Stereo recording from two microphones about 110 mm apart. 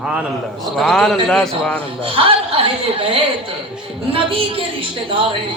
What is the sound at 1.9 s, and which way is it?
A woman's voice, 55° right (ahead or behind).